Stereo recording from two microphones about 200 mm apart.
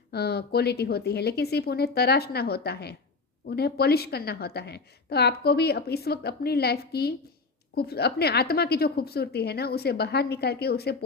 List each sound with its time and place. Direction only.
0.1 s a woman's voice: 55° left (ahead or behind)